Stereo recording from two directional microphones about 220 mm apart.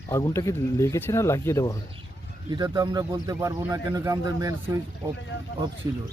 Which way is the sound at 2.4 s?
15° right (ahead or behind).